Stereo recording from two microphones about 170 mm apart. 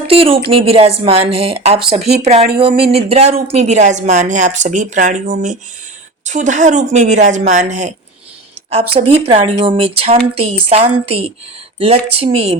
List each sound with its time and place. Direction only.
0.1 s a woman's voice: 35° right (ahead or behind)
9.0 s speech: 35° right (ahead or behind)